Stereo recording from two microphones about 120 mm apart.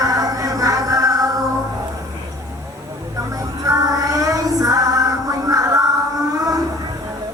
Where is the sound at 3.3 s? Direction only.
30° right (ahead or behind).